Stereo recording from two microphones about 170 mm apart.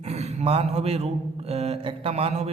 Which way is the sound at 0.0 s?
40° right (ahead or behind).